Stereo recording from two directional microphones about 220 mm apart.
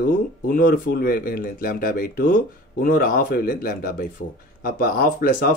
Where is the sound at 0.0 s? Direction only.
40° left (ahead or behind).